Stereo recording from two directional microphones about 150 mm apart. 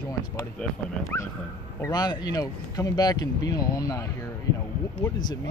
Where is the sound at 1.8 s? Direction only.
25° left (ahead or behind).